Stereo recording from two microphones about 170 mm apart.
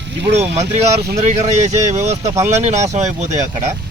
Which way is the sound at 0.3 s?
40° right (ahead or behind).